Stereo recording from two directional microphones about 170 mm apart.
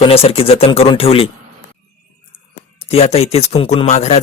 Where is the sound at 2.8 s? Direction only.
35° left (ahead or behind).